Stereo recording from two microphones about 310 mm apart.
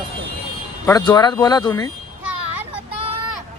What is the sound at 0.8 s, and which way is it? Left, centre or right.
Speech, centre.